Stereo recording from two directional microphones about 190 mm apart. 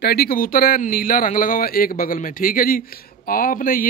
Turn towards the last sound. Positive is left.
turn(degrees=45)  # may be behind; listen again after turning